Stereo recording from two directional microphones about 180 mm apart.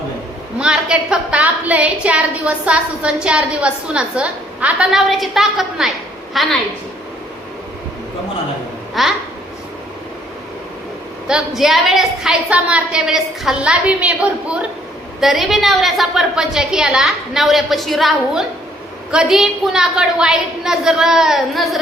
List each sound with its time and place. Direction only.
0.6 s a woman's voice: 5° right (ahead or behind)
9.0 s a woman's voice: centre (ahead or behind)
11.3 s a woman's voice: 5° right (ahead or behind)